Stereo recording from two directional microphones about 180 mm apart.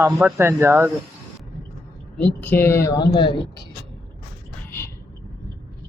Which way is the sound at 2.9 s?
25° left (ahead or behind).